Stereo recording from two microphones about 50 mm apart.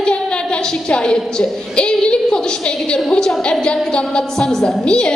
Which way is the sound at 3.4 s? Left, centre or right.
Centre.